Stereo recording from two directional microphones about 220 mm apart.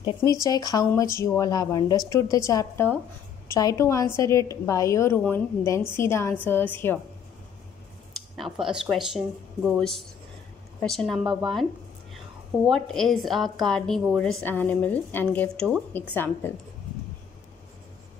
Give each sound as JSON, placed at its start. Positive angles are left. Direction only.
{"t": 0.0, "sound": "a woman's voice", "side_deg": 15}
{"t": 8.4, "sound": "a woman's voice", "side_deg": 0}
{"t": 12.6, "sound": "a woman's voice", "side_deg": 0}